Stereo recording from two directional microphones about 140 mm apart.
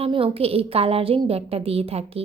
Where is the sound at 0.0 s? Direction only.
40° right (ahead or behind).